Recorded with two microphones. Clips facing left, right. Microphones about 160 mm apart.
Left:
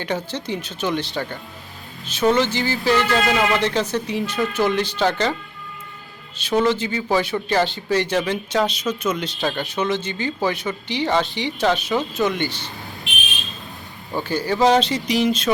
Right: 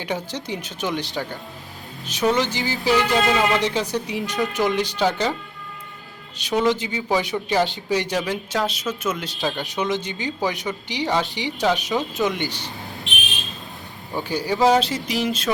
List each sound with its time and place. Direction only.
0.0 s speech: 15° right (ahead or behind)
6.5 s speech: 15° right (ahead or behind); by 9.6 s centre (ahead or behind)
9.7 s speech: 15° right (ahead or behind)
14.2 s speech: 10° right (ahead or behind)